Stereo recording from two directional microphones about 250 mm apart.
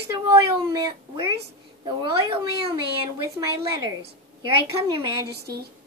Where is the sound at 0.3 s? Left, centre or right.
Centre.